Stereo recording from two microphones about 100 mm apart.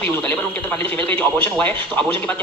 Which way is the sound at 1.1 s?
15° left (ahead or behind).